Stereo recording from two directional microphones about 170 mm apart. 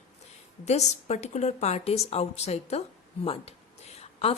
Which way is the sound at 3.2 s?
35° left (ahead or behind).